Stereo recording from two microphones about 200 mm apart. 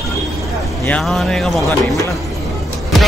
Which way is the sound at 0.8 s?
5° left (ahead or behind).